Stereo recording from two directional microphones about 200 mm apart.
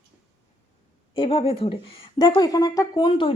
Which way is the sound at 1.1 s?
25° left (ahead or behind).